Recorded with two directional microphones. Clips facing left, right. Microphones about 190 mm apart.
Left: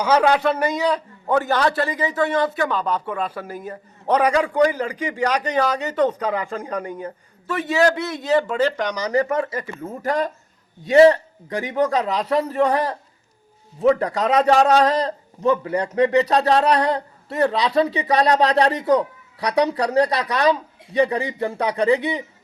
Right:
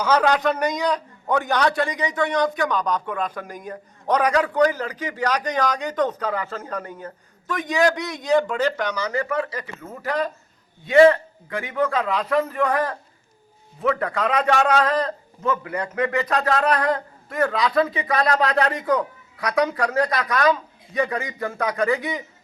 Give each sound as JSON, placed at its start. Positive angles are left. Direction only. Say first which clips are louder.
{"t": 0.0, "sound": "a man's voice", "louder": "left 2 dB", "side_deg": 10}
{"t": 9.3, "sound": "speech", "louder": "left 3 dB", "side_deg": 25}
{"t": 10.0, "sound": "a man's voice", "louder": "left 2 dB", "side_deg": 45}